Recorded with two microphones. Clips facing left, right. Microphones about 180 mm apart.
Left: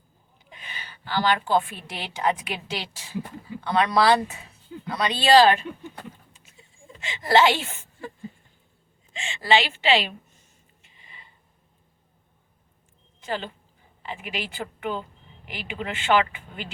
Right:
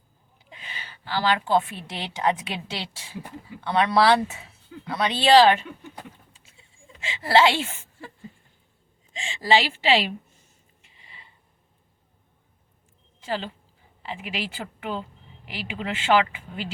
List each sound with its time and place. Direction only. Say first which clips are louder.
0.5 s a sound: even; 30° right (ahead or behind)
1.5 s a woman's voice: right 1 dB; 25° right (ahead or behind)
7.2 s a woman's voice: even; 30° right (ahead or behind)
9.1 s a woman's voice: even; 35° right (ahead or behind)
10.9 s a sound: even; 30° right (ahead or behind)
13.2 s a woman's voice: right 1 dB; 30° right (ahead or behind)